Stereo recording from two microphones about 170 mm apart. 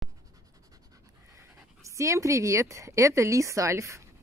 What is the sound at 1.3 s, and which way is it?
Speech, 20° right (ahead or behind).